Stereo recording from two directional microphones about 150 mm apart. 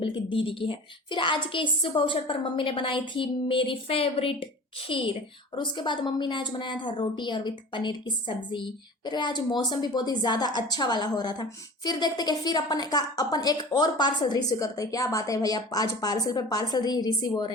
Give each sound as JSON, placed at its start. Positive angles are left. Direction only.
{"t": 0.0, "sound": "a woman's voice", "side_deg": 35}